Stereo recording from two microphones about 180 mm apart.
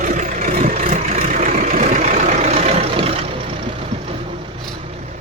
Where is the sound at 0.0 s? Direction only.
45° right (ahead or behind).